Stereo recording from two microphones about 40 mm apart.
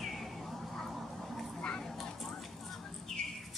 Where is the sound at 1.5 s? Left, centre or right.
Left.